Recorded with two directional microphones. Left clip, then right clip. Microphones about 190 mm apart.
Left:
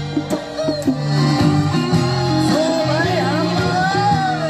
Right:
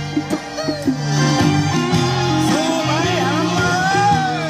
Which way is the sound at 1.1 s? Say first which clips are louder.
Right 2 dB; 30° right (ahead or behind).